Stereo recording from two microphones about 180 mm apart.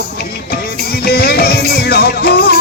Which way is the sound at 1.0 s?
60° left (ahead or behind).